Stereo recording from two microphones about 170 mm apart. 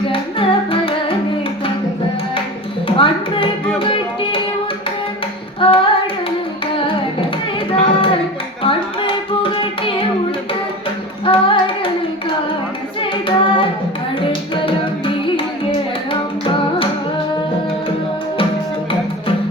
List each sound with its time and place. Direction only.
0.1 s music: 30° left (ahead or behind)
2.8 s music: 30° left (ahead or behind)
5.5 s singing: 30° left (ahead or behind)
7.7 s child singing: 30° left (ahead or behind)
8.6 s music: 30° left (ahead or behind)
11.3 s singing: 30° left (ahead or behind)
13.0 s hands: 30° left (ahead or behind)
14.5 s music: 30° left (ahead or behind)